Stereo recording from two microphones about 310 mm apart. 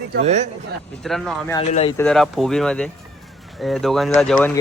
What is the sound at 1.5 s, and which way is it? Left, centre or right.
Speech, left.